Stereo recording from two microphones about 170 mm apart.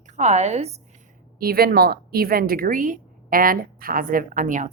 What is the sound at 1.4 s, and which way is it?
A woman's voice, 60° right (ahead or behind).